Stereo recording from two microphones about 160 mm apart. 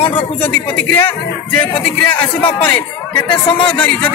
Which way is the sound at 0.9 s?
10° left (ahead or behind).